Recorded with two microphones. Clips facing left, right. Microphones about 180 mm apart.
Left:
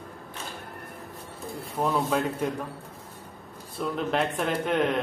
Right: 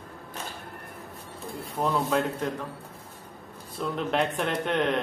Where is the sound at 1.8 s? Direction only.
10° left (ahead or behind).